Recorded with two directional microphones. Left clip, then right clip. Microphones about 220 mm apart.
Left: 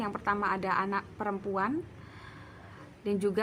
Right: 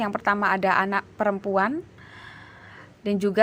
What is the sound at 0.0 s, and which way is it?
A woman's voice, 35° right (ahead or behind).